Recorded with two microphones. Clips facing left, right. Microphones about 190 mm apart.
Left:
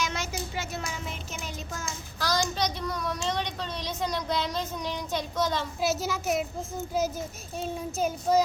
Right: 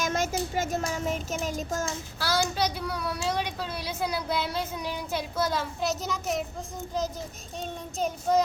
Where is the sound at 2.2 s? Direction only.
5° right (ahead or behind).